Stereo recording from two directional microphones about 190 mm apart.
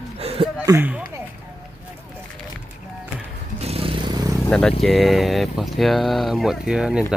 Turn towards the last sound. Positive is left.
turn(degrees=-5)  # may be behind; listen again after turning